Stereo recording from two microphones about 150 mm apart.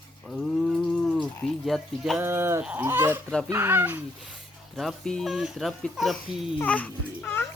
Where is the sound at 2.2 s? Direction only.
15° right (ahead or behind).